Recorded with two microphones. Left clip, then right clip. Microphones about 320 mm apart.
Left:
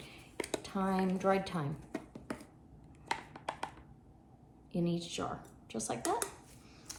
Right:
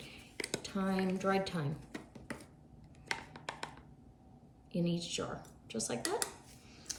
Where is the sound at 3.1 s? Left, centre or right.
Centre.